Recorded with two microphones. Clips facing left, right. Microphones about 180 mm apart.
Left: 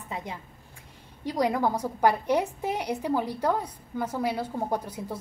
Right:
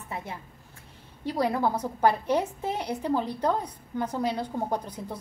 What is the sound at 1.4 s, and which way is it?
A woman's voice, 15° left (ahead or behind).